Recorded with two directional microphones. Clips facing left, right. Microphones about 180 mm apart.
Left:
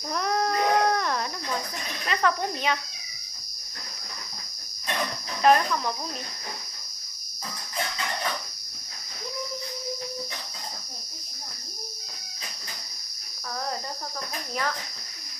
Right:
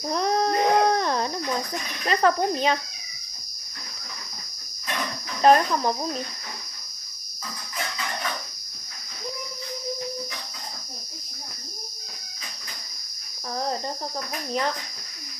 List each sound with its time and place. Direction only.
0.1 s a sound: 30° right (ahead or behind)
2.0 s speech: 35° right (ahead or behind)
5.4 s speech: 35° right (ahead or behind)